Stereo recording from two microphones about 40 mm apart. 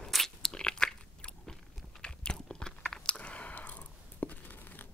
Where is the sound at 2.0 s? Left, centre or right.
Left.